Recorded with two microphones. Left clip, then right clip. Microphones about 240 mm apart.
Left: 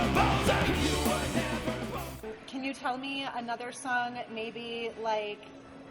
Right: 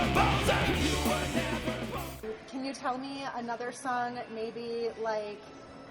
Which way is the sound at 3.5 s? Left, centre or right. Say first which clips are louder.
Even; left.